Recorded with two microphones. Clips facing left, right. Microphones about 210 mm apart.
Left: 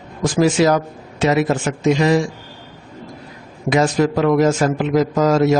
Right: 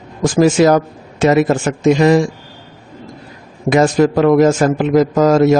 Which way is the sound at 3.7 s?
50° right (ahead or behind).